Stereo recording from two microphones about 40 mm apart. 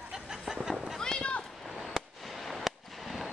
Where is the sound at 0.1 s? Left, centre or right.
Centre.